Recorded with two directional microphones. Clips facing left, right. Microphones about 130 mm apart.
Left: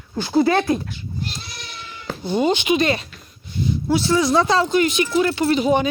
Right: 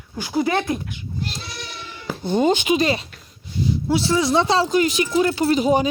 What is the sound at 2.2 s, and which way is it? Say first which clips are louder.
Speech: right 1 dB; 45° right (ahead or behind).